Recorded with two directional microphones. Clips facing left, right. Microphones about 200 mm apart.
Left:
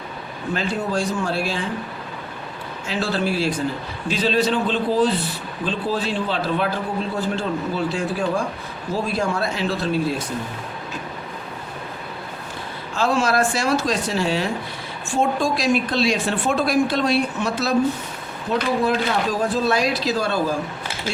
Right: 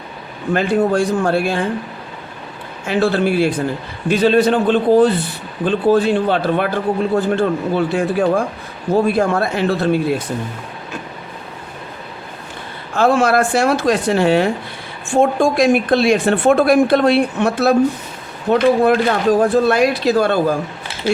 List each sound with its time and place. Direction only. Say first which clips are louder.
0.5 s a woman's voice: right 9 dB; 55° right (ahead or behind)
2.8 s a woman's voice: right 7 dB; 55° right (ahead or behind)
12.9 s a woman's voice: right 6 dB; 55° right (ahead or behind)
18.5 s speech: right 8 dB; 65° right (ahead or behind)
18.9 s a woman's voice: right 7 dB; 55° right (ahead or behind)